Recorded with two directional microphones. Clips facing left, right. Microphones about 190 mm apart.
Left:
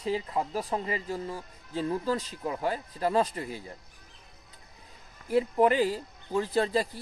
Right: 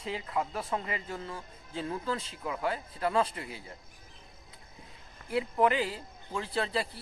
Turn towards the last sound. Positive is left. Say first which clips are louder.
# left 6 dB
turn(degrees=40)  # may be behind; listen again after turning